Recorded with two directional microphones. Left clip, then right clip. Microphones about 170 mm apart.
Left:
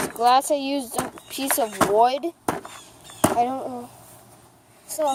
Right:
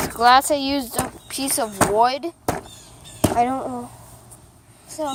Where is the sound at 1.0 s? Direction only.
5° left (ahead or behind).